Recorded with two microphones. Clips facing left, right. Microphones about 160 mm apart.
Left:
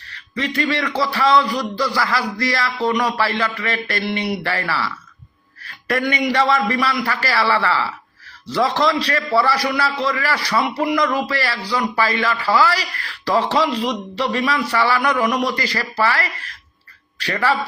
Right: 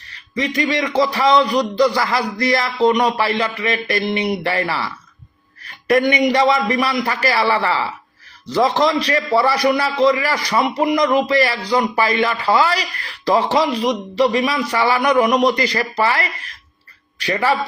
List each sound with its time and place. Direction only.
0.3 s a man's voice: 15° right (ahead or behind)